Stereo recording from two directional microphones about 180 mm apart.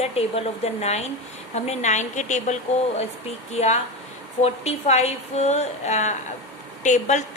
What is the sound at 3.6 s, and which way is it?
A woman's voice, 40° left (ahead or behind).